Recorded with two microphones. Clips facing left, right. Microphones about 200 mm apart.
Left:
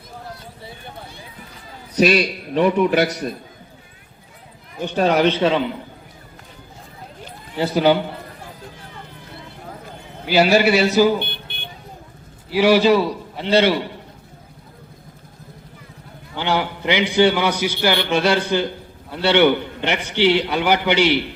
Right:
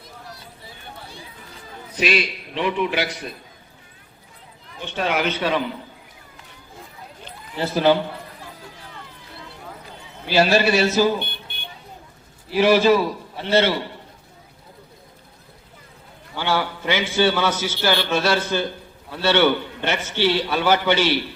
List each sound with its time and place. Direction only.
2.0 s a man's voice: 40° left (ahead or behind)
4.8 s a man's voice: 40° left (ahead or behind)
7.3 s a sound: 15° left (ahead or behind)
10.2 s a man's voice: 15° left (ahead or behind)
12.5 s a man's voice: 15° left (ahead or behind)
16.3 s a man's voice: 20° left (ahead or behind)